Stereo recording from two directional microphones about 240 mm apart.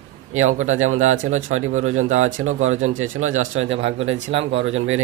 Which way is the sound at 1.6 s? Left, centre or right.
Right.